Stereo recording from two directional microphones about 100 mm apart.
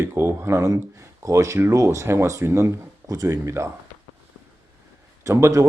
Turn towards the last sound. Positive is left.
turn(degrees=-30)  # may be behind; listen again after turning